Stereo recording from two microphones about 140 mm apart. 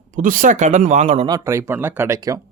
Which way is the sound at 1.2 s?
25° right (ahead or behind).